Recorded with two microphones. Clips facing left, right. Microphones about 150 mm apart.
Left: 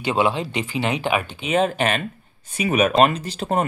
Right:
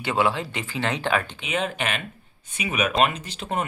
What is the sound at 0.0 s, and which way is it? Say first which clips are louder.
Speech: left 3 dB; 20° left (ahead or behind).